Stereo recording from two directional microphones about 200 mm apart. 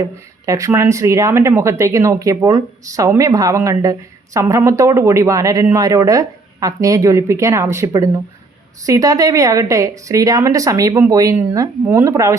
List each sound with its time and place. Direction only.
0.0 s speech: 15° right (ahead or behind)